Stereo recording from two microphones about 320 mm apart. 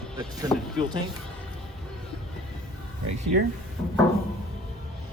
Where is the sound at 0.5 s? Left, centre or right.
Centre.